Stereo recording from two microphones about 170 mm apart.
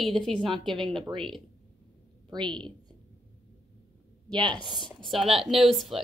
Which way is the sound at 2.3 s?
25° right (ahead or behind).